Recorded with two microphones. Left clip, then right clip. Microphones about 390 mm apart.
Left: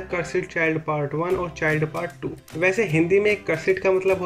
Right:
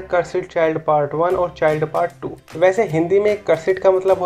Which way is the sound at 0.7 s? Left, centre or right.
Right.